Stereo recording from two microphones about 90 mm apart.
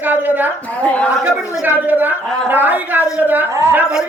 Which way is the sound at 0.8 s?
15° left (ahead or behind).